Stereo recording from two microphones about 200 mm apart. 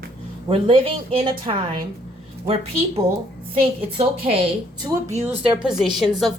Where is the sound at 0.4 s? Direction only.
25° right (ahead or behind).